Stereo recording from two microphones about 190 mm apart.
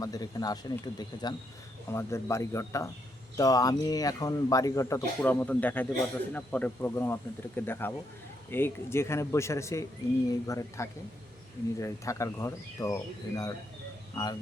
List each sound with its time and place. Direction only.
0.0 s speech: 20° left (ahead or behind)